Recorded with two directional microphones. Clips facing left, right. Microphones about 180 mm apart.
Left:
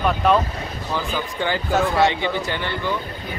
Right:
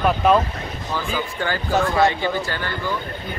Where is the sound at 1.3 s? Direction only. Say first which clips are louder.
Left 4 dB; 15° left (ahead or behind).